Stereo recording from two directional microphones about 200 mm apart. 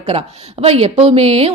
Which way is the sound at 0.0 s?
30° right (ahead or behind).